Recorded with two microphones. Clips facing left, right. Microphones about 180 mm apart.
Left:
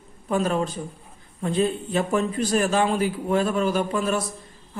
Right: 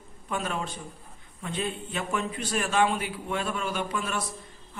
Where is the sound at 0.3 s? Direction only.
40° left (ahead or behind).